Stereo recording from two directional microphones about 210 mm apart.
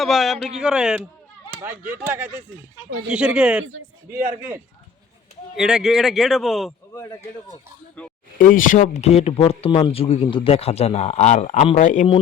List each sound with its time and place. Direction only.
0.0 s a man's voice: centre (ahead or behind)
5.5 s a man's voice: 5° right (ahead or behind)
6.9 s a man's voice: 15° left (ahead or behind)
8.4 s speech: 40° left (ahead or behind)